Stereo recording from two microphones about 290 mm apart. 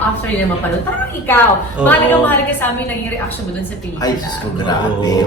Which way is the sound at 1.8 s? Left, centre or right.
Centre.